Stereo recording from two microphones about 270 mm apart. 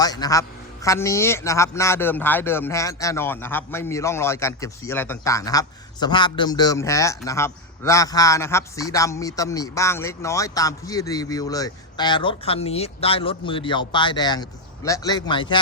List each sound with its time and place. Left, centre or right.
0.0 s a man's voice: centre